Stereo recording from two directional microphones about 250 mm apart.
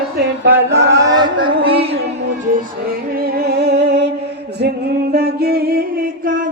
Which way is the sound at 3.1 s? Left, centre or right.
Right.